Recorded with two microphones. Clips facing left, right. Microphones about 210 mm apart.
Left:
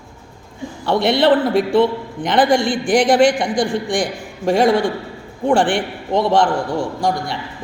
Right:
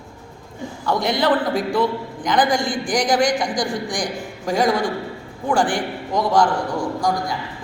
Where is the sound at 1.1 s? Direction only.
25° left (ahead or behind).